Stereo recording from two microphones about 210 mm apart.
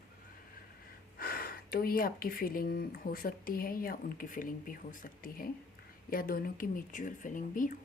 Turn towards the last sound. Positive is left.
turn(degrees=40)  # may be behind; listen again after turning